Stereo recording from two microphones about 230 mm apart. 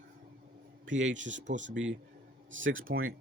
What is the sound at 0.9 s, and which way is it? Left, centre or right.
Speech, right.